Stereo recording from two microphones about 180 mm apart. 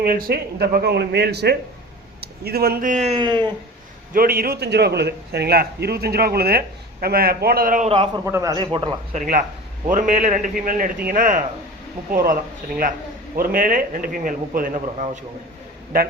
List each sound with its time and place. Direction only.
0.0 s a man's voice: 55° right (ahead or behind)
3.2 s speech: 25° right (ahead or behind)
4.1 s a man's voice: 55° right (ahead or behind)
7.9 s a man's voice: 30° right (ahead or behind)
8.2 s speech: 15° right (ahead or behind)
9.1 s a man's voice: 45° right (ahead or behind)
15.9 s a man's voice: 55° right (ahead or behind)